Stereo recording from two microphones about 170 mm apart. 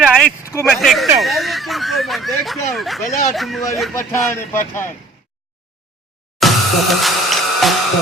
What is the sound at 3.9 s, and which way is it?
Speech, 15° left (ahead or behind).